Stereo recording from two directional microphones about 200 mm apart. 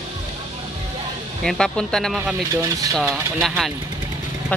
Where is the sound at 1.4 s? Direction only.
5° left (ahead or behind).